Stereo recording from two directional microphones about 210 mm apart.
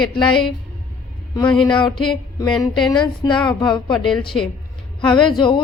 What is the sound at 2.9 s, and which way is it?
Speech, 20° left (ahead or behind).